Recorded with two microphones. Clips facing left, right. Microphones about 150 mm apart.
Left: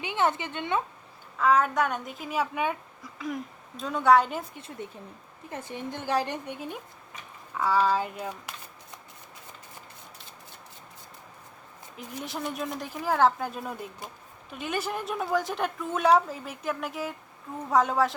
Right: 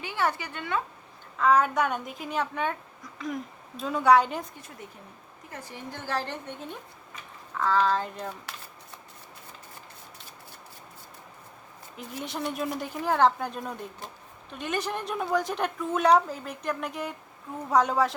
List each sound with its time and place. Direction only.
0.0 s a woman's voice: 20° left (ahead or behind)
1.4 s a woman's voice: centre (ahead or behind)
5.5 s a woman's voice: 25° left (ahead or behind); by 8.5 s 10° left (ahead or behind)
11.9 s a woman's voice: centre (ahead or behind)